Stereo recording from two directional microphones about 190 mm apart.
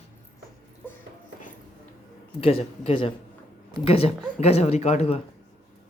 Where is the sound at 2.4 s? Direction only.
30° left (ahead or behind).